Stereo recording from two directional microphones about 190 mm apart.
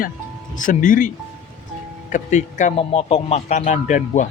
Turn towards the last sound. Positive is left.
turn(degrees=40)  # may be behind; listen again after turning